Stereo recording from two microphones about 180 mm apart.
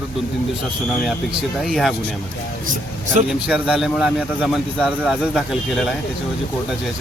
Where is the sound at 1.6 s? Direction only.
Centre (ahead or behind).